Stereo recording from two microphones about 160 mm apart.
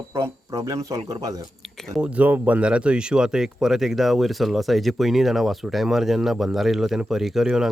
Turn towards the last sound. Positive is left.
turn(degrees=-5)  # may be behind; listen again after turning